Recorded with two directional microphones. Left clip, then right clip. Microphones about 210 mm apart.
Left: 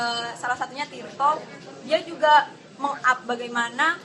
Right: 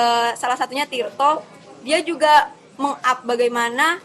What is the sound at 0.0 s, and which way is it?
A woman's voice, 35° right (ahead or behind).